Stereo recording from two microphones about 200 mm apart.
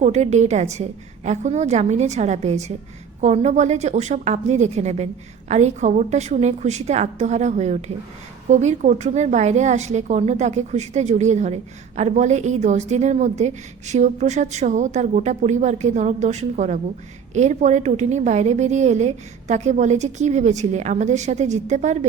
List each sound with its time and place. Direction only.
0.0 s a woman's voice: 35° right (ahead or behind)